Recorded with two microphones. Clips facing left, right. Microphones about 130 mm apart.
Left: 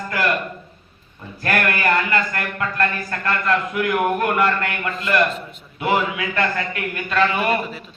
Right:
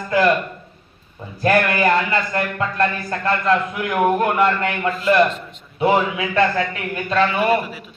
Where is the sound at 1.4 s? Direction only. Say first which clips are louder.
Right 5 dB; 25° right (ahead or behind).